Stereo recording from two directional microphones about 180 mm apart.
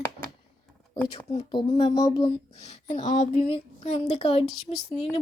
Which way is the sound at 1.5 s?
25° left (ahead or behind).